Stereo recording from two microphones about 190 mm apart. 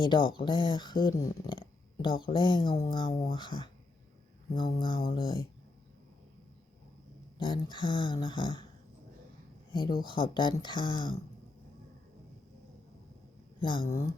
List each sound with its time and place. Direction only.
0.0 s speech: 25° left (ahead or behind)
7.3 s speech: 25° left (ahead or behind)
10.0 s speech: 25° left (ahead or behind)
13.6 s speech: 25° left (ahead or behind)